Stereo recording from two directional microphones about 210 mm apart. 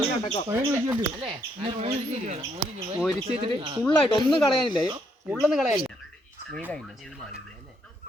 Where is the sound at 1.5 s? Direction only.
25° right (ahead or behind).